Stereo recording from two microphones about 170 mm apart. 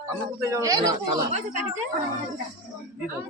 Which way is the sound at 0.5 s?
20° right (ahead or behind).